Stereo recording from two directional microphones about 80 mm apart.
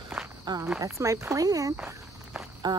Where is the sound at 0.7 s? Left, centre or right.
Right.